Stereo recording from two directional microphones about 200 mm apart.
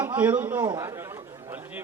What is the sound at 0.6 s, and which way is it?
Speech, 20° right (ahead or behind).